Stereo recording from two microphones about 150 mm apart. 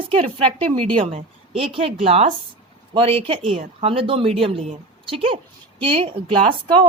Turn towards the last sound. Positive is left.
turn(degrees=-35)  # may be behind; listen again after turning